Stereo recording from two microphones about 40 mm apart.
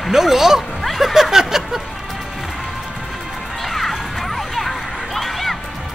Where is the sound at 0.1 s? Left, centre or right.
Centre.